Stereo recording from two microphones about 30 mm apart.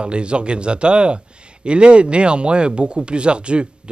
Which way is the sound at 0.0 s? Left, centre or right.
Right.